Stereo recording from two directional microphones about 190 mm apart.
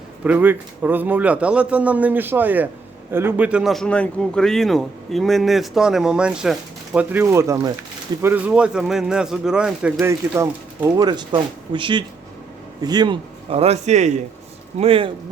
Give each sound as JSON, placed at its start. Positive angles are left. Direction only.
{"t": 0.3, "sound": "a man's voice", "side_deg": -10}
{"t": 10.0, "sound": "a man's voice", "side_deg": -15}